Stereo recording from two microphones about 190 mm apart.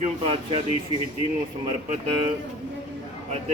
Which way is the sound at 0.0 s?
30° right (ahead or behind).